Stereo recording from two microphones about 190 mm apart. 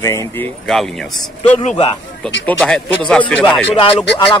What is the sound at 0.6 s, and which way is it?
Speech, centre (ahead or behind).